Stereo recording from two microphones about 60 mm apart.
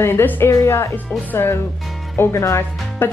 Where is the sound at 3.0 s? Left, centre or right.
Left.